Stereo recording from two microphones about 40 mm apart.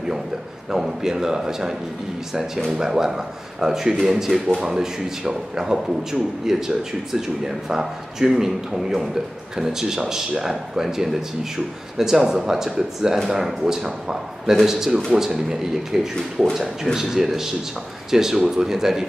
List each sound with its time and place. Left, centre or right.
0.7 s speech: centre
2.8 s speech: centre